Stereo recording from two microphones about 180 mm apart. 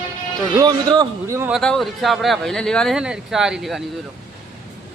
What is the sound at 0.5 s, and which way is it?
Speech, 20° right (ahead or behind).